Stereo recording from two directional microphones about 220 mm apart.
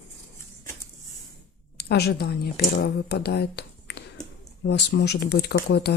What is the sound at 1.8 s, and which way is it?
A woman's voice, 50° left (ahead or behind).